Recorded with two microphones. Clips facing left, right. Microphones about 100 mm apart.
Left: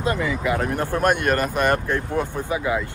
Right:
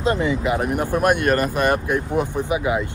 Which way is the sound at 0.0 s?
25° right (ahead or behind).